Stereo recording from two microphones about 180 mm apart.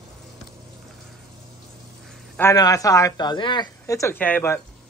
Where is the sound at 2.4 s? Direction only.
15° left (ahead or behind).